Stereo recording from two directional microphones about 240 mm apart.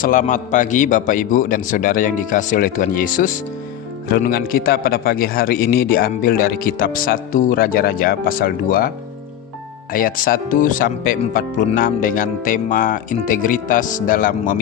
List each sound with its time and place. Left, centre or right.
0.0 s a man's voice: left
9.9 s a man's voice: left